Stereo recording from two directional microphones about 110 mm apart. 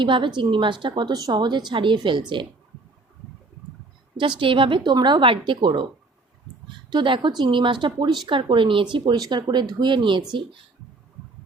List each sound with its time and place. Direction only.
0.0 s speech: 45° right (ahead or behind)
4.2 s speech: 50° right (ahead or behind)
6.9 s speech: 50° right (ahead or behind)